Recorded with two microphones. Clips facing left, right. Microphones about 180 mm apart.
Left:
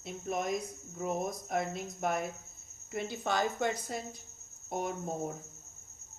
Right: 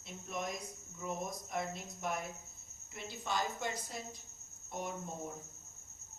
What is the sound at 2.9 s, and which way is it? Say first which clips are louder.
Speech: left 7 dB; 65° left (ahead or behind).